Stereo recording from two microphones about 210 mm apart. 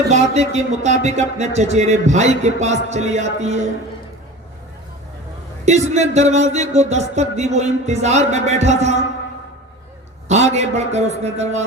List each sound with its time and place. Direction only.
0.1 s speech: 30° right (ahead or behind)
5.6 s speech: 35° right (ahead or behind)
10.2 s speech: 30° right (ahead or behind)